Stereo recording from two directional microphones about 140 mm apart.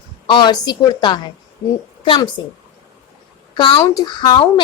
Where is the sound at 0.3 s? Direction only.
35° left (ahead or behind).